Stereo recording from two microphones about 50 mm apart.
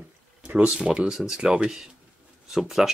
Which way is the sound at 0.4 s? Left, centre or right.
Right.